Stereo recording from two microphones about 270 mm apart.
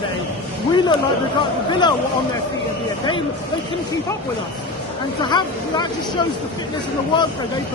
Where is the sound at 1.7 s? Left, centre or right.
Centre.